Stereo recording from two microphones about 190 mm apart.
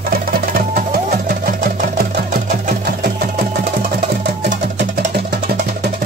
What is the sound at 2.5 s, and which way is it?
Sewing machine, 50° right (ahead or behind).